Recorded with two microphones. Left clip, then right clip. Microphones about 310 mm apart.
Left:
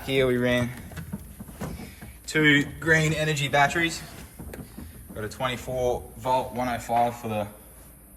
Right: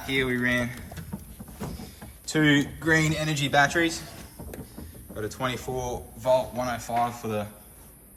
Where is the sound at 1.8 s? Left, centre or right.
Centre.